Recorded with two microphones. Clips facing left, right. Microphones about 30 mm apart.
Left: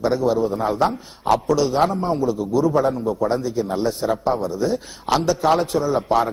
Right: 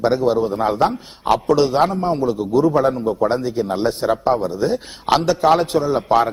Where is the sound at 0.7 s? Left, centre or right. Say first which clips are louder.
Right 2 dB; right.